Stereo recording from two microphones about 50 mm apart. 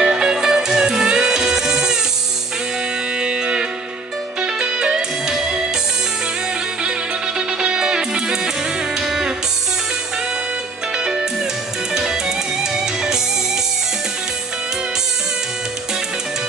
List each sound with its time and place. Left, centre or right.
0.0 s music: centre
3.2 s music: centre
7.3 s music: centre
11.9 s music: centre